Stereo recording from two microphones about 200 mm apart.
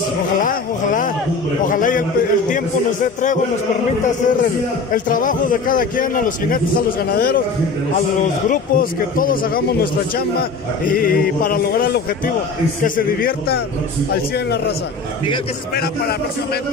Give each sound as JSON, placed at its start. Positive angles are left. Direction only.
{"t": 0.4, "sound": "a sound", "side_deg": 40}
{"t": 1.6, "sound": "a man's voice", "side_deg": 40}
{"t": 4.9, "sound": "speech", "side_deg": 40}
{"t": 15.7, "sound": "speech", "side_deg": 50}